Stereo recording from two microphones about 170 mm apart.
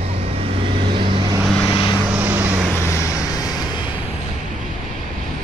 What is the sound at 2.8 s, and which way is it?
Vehicle, 15° left (ahead or behind).